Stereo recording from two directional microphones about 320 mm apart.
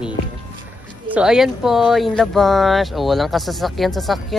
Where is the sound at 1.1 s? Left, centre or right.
Centre.